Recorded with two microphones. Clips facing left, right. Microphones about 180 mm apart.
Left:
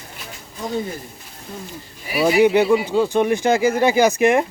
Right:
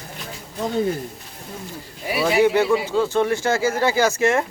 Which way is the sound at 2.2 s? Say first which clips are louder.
Left 3 dB; 15° left (ahead or behind).